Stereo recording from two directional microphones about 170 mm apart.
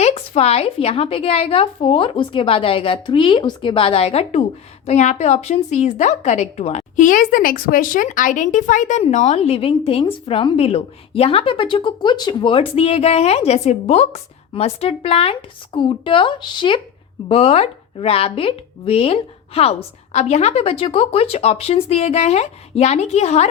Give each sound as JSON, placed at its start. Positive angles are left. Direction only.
{"t": 0.0, "sound": "a woman's voice", "side_deg": 35}